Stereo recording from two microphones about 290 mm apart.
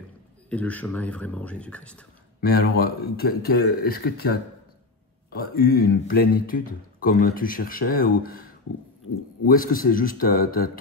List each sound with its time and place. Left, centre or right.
0.5 s speech: centre
2.4 s a man's voice: left